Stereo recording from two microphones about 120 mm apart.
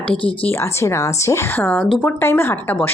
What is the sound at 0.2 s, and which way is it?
Speech, 50° left (ahead or behind).